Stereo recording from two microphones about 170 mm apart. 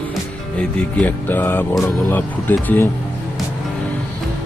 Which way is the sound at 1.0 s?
10° left (ahead or behind).